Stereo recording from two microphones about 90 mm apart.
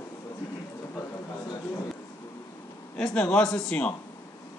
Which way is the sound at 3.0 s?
10° left (ahead or behind).